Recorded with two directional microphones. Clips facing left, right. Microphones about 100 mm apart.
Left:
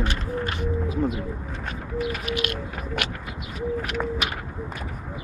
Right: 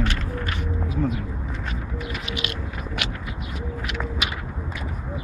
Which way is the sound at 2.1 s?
50° left (ahead or behind).